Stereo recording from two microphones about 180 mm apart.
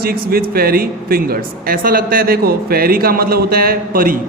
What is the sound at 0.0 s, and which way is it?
Speech, 55° right (ahead or behind).